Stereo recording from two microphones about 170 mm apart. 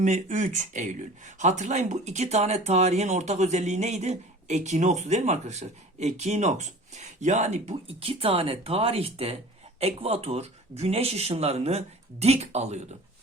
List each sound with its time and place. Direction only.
0.0 s speech: 45° right (ahead or behind)